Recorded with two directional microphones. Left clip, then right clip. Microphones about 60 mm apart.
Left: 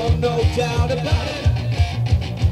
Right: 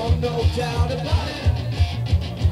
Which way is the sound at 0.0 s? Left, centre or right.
Left.